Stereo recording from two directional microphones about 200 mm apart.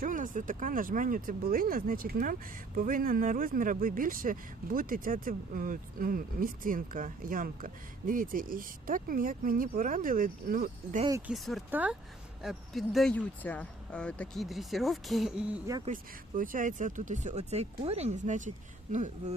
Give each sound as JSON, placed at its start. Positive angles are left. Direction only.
{"t": 0.0, "sound": "speech", "side_deg": -40}
{"t": 11.3, "sound": "speech", "side_deg": 0}
{"t": 15.9, "sound": "speech", "side_deg": -40}